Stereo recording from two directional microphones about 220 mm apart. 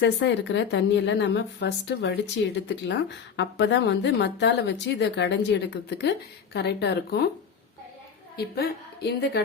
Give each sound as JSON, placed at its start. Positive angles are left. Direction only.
{"t": 0.0, "sound": "a woman's voice", "side_deg": 55}
{"t": 8.4, "sound": "a woman's voice", "side_deg": 45}